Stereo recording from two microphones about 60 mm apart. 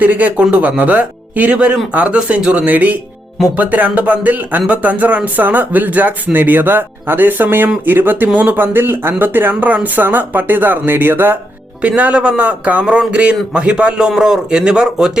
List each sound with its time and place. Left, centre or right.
0.0 s speech: right
11.8 s speech: right